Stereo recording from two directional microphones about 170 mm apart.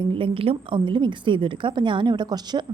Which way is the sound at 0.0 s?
30° right (ahead or behind).